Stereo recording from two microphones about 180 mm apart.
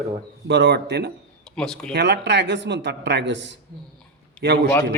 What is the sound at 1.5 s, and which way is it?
Speech, 5° left (ahead or behind).